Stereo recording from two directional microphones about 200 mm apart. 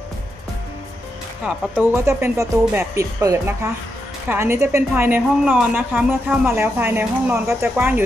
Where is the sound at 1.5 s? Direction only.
10° right (ahead or behind).